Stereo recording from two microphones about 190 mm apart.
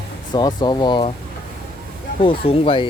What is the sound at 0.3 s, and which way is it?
Speech, 20° left (ahead or behind).